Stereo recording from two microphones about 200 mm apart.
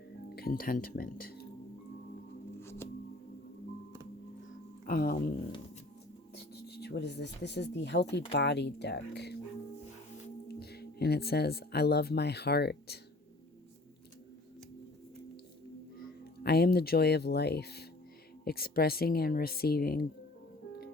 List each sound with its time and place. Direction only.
0.3 s speech: 45° left (ahead or behind)
2.6 s music: 10° left (ahead or behind)
4.9 s speech: 45° left (ahead or behind)
6.3 s speech: 55° left (ahead or behind)
10.5 s speech: 55° left (ahead or behind)
16.4 s speech: 55° left (ahead or behind)